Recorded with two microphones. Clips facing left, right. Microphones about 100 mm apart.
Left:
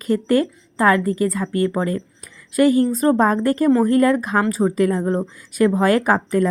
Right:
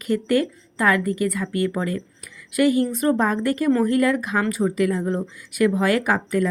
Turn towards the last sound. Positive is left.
turn(degrees=40)  # may be behind; listen again after turning